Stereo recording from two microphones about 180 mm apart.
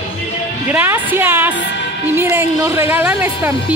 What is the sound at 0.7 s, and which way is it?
Music, 10° right (ahead or behind).